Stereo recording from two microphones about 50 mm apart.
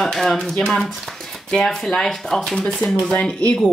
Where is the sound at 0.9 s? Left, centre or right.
Centre.